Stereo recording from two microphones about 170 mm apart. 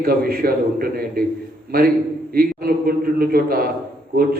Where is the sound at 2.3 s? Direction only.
60° right (ahead or behind).